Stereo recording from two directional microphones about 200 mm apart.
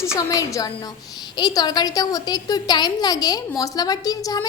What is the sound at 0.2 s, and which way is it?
A woman's voice, 15° left (ahead or behind).